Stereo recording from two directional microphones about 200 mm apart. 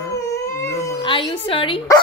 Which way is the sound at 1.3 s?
25° left (ahead or behind).